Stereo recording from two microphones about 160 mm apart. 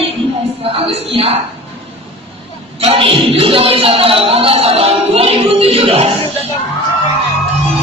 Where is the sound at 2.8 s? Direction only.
35° right (ahead or behind).